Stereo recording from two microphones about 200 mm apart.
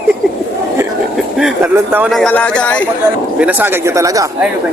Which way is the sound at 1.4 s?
5° right (ahead or behind).